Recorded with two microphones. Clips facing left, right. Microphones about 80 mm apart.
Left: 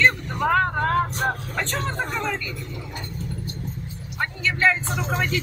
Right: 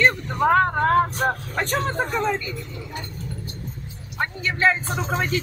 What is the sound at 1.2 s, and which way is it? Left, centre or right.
Speech, centre.